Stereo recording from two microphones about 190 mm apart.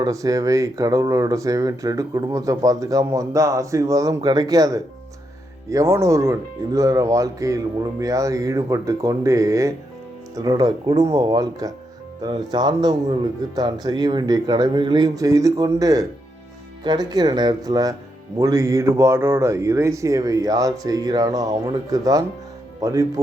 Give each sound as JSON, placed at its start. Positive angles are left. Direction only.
{"t": 0.0, "sound": "a man's voice", "side_deg": -15}